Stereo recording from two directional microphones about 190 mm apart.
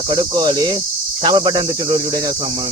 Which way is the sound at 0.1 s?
25° right (ahead or behind).